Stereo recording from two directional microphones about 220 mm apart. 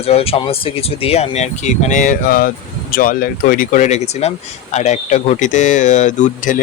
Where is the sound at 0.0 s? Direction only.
25° left (ahead or behind).